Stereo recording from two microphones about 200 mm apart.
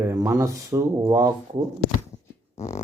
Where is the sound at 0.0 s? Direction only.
15° right (ahead or behind).